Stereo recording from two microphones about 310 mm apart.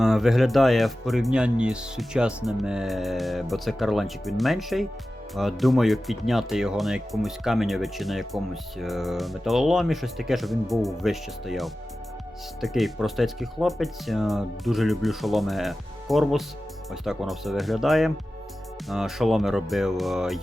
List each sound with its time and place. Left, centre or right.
0.0 s speech: centre